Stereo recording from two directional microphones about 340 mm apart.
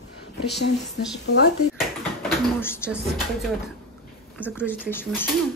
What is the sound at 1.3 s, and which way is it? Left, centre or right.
Speech, left.